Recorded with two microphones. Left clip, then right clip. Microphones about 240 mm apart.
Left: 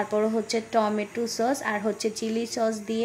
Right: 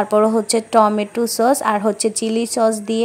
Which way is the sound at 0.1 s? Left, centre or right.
Right.